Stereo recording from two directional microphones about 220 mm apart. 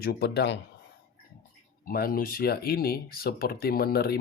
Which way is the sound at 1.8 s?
40° left (ahead or behind).